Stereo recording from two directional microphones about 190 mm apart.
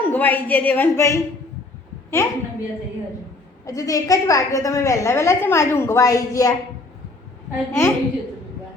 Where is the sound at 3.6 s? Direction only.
15° left (ahead or behind).